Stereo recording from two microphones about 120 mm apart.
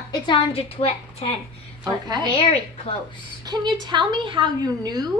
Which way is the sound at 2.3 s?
50° left (ahead or behind).